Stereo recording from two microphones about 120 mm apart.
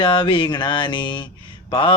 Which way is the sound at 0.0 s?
45° left (ahead or behind).